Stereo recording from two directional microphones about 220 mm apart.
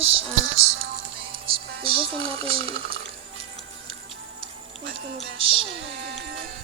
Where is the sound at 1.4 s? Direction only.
25° right (ahead or behind).